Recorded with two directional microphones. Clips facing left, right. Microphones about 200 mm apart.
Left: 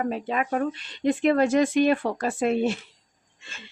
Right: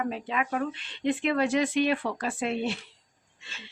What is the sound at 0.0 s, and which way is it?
Speech, 40° left (ahead or behind).